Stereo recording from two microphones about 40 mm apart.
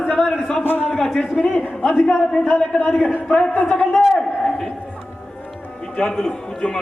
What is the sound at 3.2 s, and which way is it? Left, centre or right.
Speech, left.